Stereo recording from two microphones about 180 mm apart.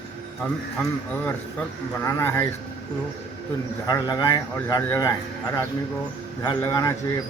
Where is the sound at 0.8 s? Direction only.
10° left (ahead or behind).